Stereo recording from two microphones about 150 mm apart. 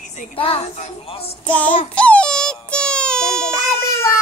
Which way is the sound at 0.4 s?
40° left (ahead or behind).